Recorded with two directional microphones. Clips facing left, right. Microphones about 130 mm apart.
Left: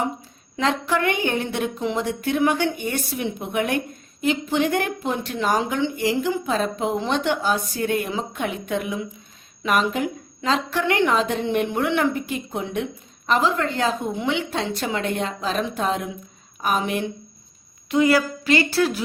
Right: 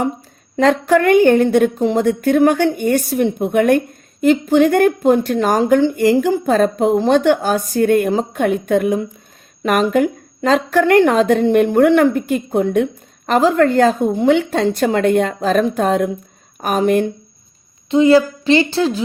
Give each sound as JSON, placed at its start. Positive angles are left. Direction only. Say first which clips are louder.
{"t": 0.5, "sound": "a woman's voice", "louder": "right 9 dB", "side_deg": -50}
{"t": 17.8, "sound": "a woman's voice", "louder": "right 7 dB", "side_deg": -25}